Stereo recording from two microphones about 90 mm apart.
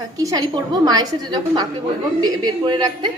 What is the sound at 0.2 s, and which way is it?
Speech, 40° right (ahead or behind).